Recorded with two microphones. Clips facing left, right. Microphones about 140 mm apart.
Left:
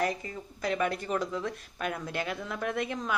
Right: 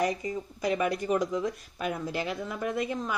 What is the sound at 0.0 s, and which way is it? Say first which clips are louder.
A woman's voice: right 3 dB; 10° right (ahead or behind).